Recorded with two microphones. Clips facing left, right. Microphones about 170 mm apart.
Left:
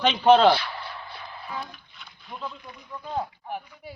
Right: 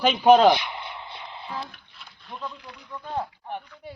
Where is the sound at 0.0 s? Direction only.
10° right (ahead or behind).